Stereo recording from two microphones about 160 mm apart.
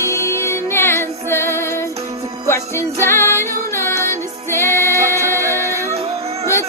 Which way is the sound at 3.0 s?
15° left (ahead or behind).